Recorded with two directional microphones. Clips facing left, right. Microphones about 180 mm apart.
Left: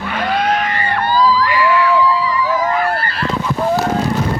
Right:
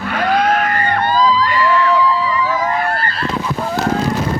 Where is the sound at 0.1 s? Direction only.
55° right (ahead or behind).